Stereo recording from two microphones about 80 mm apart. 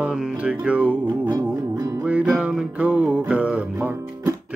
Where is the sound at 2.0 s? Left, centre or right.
Centre.